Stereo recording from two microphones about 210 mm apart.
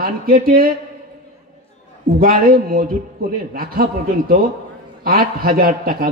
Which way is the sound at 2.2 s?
45° right (ahead or behind).